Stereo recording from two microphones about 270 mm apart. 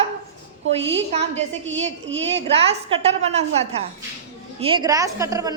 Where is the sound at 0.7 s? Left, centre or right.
Right.